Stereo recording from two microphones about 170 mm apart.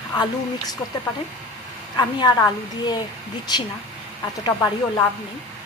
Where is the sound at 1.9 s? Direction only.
25° left (ahead or behind).